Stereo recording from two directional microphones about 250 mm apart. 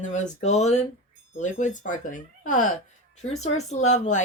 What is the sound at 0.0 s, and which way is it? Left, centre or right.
Speech, left.